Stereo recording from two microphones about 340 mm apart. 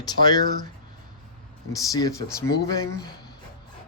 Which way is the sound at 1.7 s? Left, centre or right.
Centre.